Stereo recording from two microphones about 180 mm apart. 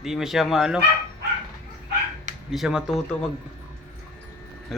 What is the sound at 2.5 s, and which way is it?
Speech, centre (ahead or behind).